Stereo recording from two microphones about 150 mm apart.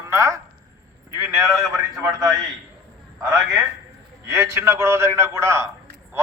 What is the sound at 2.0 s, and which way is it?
A man's voice, 20° right (ahead or behind).